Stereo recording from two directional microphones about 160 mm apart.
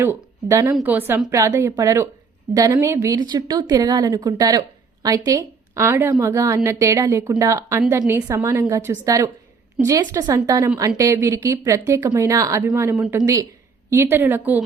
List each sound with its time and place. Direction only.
0.0 s a woman's voice: 15° right (ahead or behind)